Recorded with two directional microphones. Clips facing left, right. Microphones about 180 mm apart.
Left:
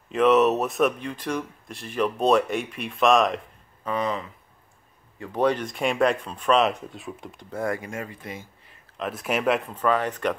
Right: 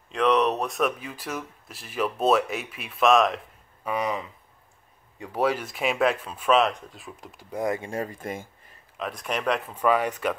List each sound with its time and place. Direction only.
0.1 s speech: 5° left (ahead or behind)
3.8 s speech: 10° right (ahead or behind)
7.5 s speech: 20° right (ahead or behind)
7.9 s speech: 40° right (ahead or behind)
8.9 s speech: centre (ahead or behind)
9.7 s speech: 10° right (ahead or behind)